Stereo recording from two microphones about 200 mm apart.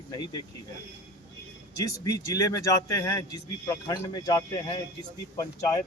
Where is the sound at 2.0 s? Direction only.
15° left (ahead or behind).